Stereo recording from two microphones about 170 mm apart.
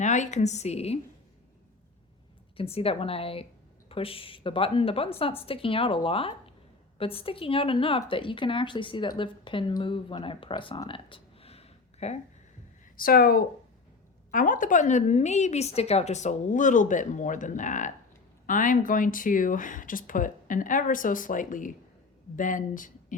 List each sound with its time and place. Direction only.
0.0 s a woman's voice: 45° left (ahead or behind)
2.6 s a woman's voice: 35° left (ahead or behind)
12.8 s a woman's voice: 55° left (ahead or behind)